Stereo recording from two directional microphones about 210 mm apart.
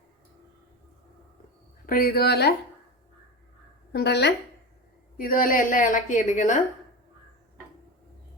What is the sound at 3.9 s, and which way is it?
Speech, 50° left (ahead or behind).